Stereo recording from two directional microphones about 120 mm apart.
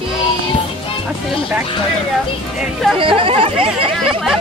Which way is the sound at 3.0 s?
50° right (ahead or behind).